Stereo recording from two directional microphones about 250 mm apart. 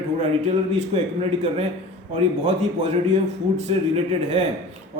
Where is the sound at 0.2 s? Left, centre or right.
Right.